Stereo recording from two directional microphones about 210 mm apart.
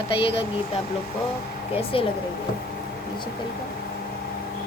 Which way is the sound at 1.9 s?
25° left (ahead or behind).